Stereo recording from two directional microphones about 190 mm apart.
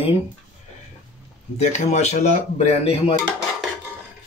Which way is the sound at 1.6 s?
35° left (ahead or behind).